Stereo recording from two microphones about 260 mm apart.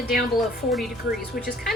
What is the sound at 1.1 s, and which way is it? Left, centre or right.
Speech, left.